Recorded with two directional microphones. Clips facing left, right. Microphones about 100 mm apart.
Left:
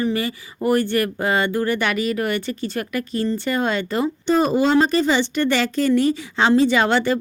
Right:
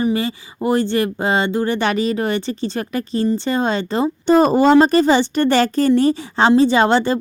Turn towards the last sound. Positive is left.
turn(degrees=-30)  # may be behind; listen again after turning